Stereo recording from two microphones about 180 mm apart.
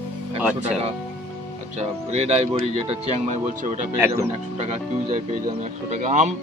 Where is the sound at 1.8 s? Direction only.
35° right (ahead or behind).